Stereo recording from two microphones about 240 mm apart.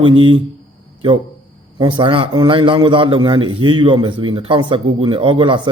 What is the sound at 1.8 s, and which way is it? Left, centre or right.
A man's voice, centre.